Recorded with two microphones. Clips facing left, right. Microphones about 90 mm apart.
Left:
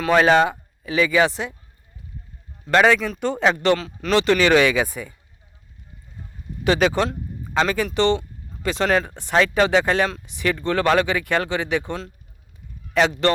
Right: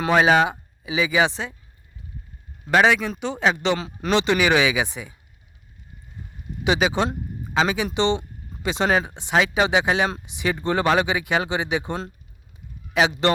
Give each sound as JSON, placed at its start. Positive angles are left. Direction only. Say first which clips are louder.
{"t": 0.1, "sound": "speech", "louder": "left 2 dB", "side_deg": -10}
{"t": 1.3, "sound": "speech", "louder": "left 2 dB", "side_deg": 10}
{"t": 2.6, "sound": "speech", "louder": "left 1 dB", "side_deg": -10}
{"t": 6.7, "sound": "speech", "louder": "left 2 dB", "side_deg": -10}
{"t": 7.9, "sound": "speech", "louder": "left 2 dB", "side_deg": -25}
{"t": 8.8, "sound": "speech", "louder": "left 1 dB", "side_deg": -10}
{"t": 10.6, "sound": "speech", "louder": "even", "side_deg": -30}
{"t": 10.8, "sound": "speech", "louder": "left 2 dB", "side_deg": -15}
{"t": 11.4, "sound": "speech", "louder": "left 1 dB", "side_deg": -30}
{"t": 12.9, "sound": "a man's voice", "louder": "left 1 dB", "side_deg": -15}